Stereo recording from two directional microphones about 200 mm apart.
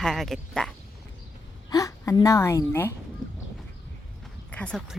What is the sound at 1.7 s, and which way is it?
Speech, 15° left (ahead or behind).